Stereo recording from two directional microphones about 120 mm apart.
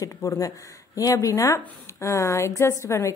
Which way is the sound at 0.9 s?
30° left (ahead or behind).